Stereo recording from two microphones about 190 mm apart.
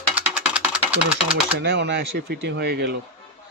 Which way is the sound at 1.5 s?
60° right (ahead or behind).